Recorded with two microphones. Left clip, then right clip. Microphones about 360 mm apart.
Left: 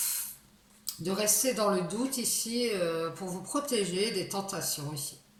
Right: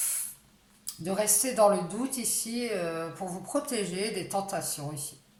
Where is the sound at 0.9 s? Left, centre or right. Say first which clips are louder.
Right 1 dB; centre.